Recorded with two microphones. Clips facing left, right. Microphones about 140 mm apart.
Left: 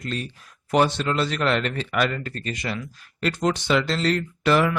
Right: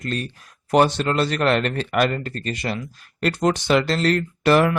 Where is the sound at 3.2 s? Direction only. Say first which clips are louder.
Right 3 dB; 50° right (ahead or behind).